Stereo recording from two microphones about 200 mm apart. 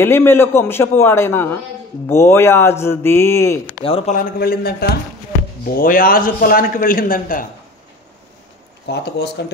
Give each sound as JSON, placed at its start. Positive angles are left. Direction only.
{"t": 0.0, "sound": "a man's voice", "side_deg": 10}
{"t": 3.8, "sound": "a man's voice", "side_deg": 30}
{"t": 4.2, "sound": "a man's voice", "side_deg": 50}
{"t": 8.8, "sound": "speech", "side_deg": 55}